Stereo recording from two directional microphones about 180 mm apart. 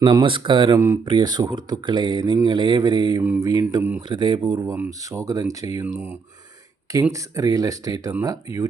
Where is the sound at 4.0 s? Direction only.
25° right (ahead or behind).